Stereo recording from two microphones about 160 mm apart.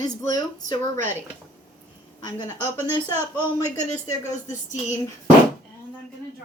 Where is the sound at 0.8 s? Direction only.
50° right (ahead or behind).